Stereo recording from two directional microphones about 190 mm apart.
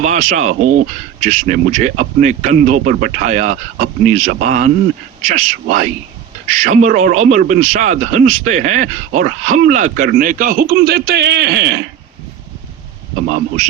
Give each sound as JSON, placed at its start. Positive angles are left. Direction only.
{"t": 0.0, "sound": "speech", "side_deg": -45}